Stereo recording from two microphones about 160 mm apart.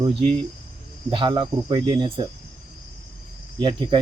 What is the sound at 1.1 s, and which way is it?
Speech, 30° right (ahead or behind).